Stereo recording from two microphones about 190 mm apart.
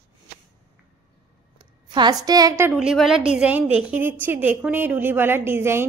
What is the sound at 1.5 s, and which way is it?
A woman's voice, 25° right (ahead or behind).